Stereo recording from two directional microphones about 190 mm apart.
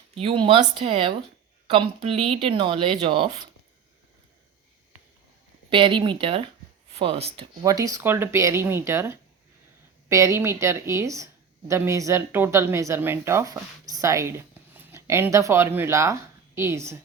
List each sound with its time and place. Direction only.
0.2 s speech: 30° right (ahead or behind)
5.7 s speech: 25° right (ahead or behind)
7.6 s speech: 20° right (ahead or behind)